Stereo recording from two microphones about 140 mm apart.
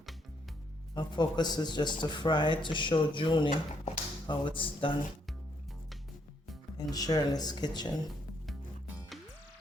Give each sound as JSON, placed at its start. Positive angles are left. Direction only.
{"t": 0.9, "sound": "speech", "side_deg": 30}
{"t": 6.7, "sound": "speech", "side_deg": 25}